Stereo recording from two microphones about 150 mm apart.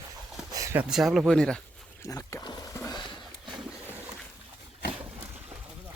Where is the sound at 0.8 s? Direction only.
5° right (ahead or behind).